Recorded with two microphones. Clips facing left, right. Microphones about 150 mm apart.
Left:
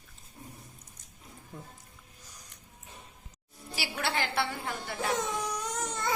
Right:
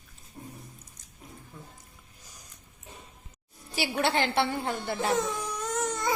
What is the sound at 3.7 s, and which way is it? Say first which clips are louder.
A woman's voice: right 6 dB; 20° right (ahead or behind).